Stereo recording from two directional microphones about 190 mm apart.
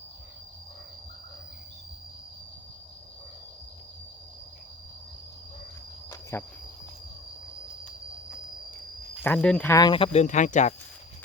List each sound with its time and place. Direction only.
6.3 s speech: 15° left (ahead or behind)
9.2 s speech: 5° left (ahead or behind)
9.7 s speech: 25° left (ahead or behind)